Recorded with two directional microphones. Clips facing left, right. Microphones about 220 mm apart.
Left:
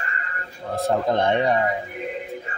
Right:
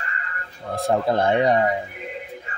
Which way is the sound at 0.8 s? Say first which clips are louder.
Right 1 dB; 5° right (ahead or behind).